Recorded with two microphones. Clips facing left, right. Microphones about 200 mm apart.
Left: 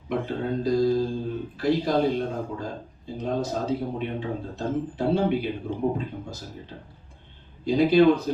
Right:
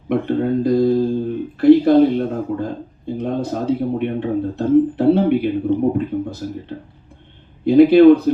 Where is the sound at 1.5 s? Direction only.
60° right (ahead or behind).